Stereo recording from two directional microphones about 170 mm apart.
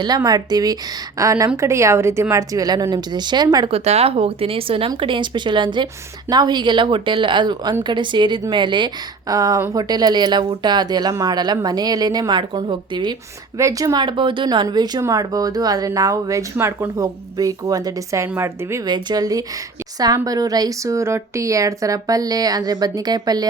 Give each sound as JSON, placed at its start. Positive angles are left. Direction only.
{"t": 0.3, "sound": "speech", "side_deg": -20}
{"t": 3.7, "sound": "speech", "side_deg": -35}